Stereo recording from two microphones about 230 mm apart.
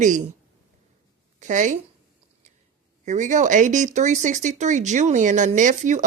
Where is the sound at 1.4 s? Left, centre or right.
Right.